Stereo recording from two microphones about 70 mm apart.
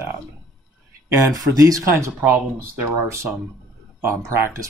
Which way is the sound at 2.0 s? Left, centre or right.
Right.